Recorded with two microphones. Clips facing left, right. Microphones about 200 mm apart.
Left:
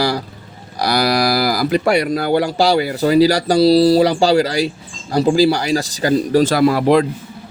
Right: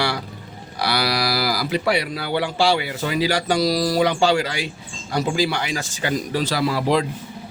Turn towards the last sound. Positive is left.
turn(degrees=55)  # may be behind; listen again after turning